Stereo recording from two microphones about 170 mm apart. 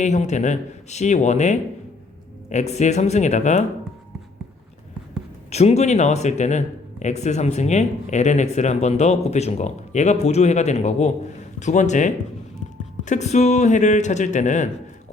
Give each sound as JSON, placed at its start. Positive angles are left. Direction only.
{"t": 0.0, "sound": "a man's voice", "side_deg": 45}
{"t": 5.5, "sound": "a man's voice", "side_deg": 40}